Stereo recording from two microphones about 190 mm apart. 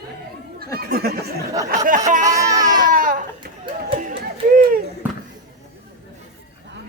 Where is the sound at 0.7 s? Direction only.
55° right (ahead or behind).